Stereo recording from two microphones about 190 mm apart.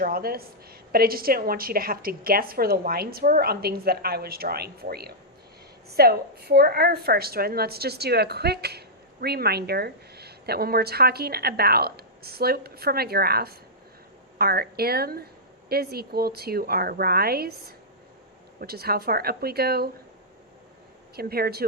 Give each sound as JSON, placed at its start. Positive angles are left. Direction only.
{"t": 0.0, "sound": "a woman's voice", "side_deg": -50}
{"t": 21.2, "sound": "a woman's voice", "side_deg": -55}